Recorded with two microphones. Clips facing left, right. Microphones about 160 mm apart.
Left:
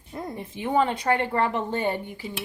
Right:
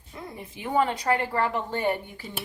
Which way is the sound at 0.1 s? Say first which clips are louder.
Left 6 dB; 45° left (ahead or behind).